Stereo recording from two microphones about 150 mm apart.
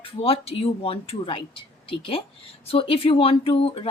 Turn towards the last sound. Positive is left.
turn(degrees=40)  # may be behind; listen again after turning